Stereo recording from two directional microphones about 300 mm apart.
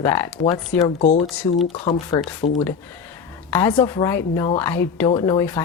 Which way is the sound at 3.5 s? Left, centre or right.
Centre.